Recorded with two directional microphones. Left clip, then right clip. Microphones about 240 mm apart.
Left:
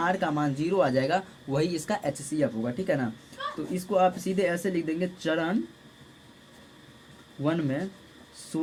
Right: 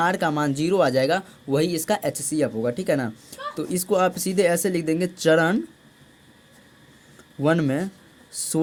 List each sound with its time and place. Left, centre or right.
0.0 s speech: right
7.4 s speech: right